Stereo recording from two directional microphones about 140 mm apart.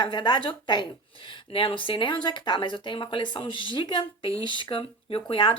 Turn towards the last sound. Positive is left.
turn(degrees=35)  # may be behind; listen again after turning